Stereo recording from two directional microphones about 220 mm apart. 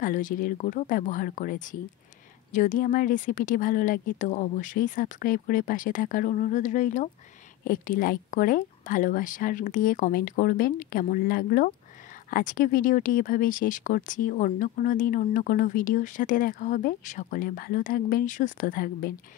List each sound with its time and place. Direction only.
0.0 s speech: 35° left (ahead or behind)